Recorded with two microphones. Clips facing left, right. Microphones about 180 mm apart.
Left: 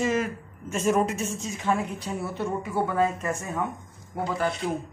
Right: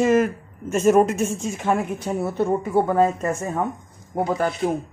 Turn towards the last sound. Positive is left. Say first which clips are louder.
# right 5 dB
turn(degrees=-50)  # may be behind; listen again after turning